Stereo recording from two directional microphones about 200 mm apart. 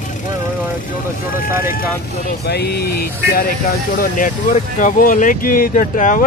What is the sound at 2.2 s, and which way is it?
Speech, 55° left (ahead or behind).